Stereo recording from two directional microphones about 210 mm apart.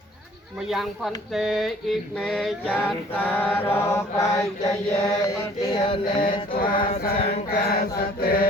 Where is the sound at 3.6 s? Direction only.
10° left (ahead or behind).